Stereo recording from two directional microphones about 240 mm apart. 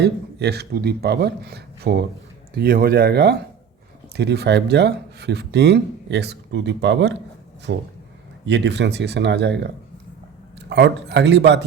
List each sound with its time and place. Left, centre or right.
0.0 s speech: right
10.7 s speech: right